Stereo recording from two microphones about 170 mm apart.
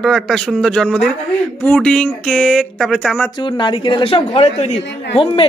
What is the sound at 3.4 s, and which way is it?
A woman's voice, 30° left (ahead or behind).